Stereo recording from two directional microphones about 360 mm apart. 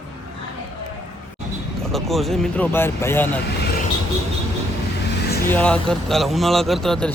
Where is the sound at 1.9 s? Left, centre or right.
Centre.